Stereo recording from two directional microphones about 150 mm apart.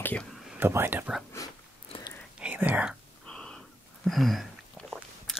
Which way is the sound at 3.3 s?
5° left (ahead or behind).